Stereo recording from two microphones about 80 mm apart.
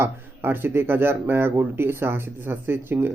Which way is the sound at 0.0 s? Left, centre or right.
Right.